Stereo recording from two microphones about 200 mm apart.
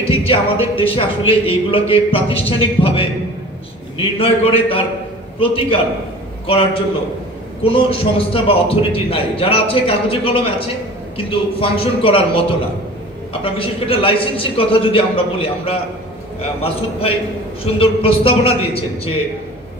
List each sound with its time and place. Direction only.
0.1 s speech: 25° left (ahead or behind)